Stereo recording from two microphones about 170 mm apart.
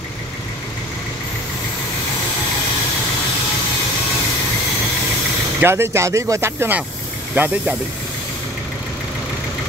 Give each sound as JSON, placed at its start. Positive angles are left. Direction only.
{"t": 5.6, "sound": "speech", "side_deg": -15}